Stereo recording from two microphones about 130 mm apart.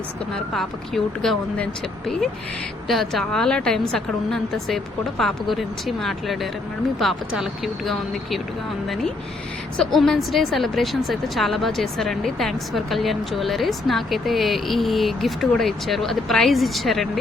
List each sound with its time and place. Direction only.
0.5 s a woman's voice: 5° left (ahead or behind)
2.8 s a woman's voice: centre (ahead or behind)
9.7 s a woman's voice: 5° left (ahead or behind)